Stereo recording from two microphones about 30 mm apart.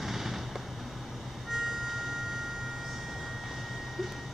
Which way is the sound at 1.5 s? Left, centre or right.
Centre.